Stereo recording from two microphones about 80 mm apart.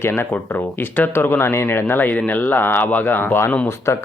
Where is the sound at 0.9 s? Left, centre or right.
Left.